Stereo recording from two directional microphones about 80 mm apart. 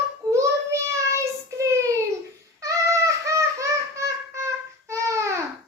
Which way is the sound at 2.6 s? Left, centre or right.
Right.